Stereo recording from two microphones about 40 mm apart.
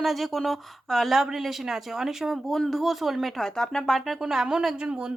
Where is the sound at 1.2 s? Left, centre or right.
Centre.